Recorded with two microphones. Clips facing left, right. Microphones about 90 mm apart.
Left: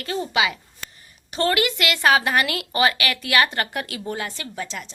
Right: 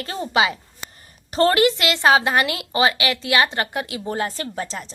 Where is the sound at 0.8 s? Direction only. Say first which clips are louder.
Right 1 dB; 15° right (ahead or behind).